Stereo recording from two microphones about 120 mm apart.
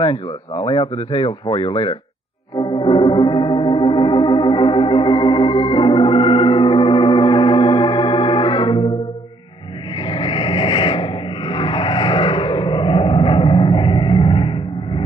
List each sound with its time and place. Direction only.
0.0 s speech: 45° left (ahead or behind)
2.6 s music: 40° left (ahead or behind)
10.0 s a sound: 45° left (ahead or behind)